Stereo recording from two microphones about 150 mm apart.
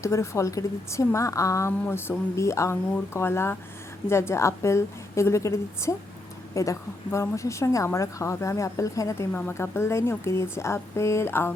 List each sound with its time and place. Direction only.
0.0 s a woman's voice: 20° left (ahead or behind)